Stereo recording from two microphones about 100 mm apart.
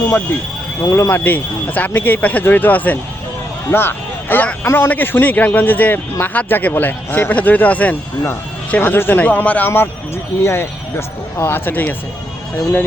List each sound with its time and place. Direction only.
0.8 s speech: 30° left (ahead or behind)
1.1 s a man's voice: 20° left (ahead or behind)